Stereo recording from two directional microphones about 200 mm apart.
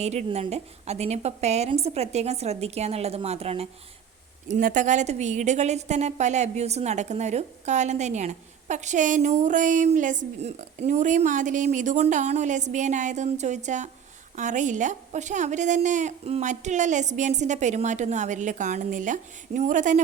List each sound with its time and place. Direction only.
0.0 s a woman's voice: 35° right (ahead or behind)